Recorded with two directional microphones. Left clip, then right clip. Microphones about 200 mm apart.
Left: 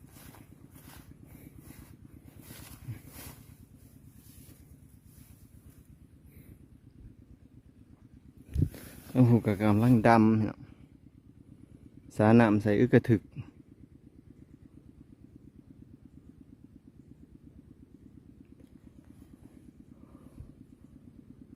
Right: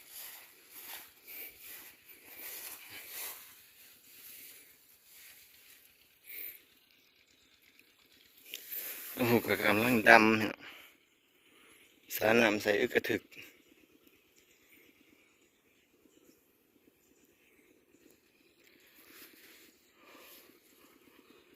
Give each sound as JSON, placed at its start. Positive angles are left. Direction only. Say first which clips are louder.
{"t": 9.2, "sound": "speech", "louder": "even", "side_deg": 10}
{"t": 12.0, "sound": "speech", "louder": "left 3 dB", "side_deg": 25}